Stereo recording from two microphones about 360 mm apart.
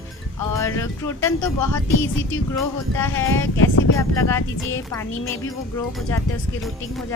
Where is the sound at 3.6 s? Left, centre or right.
Left.